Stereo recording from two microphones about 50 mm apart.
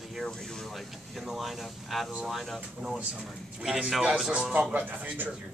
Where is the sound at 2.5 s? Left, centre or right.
Centre.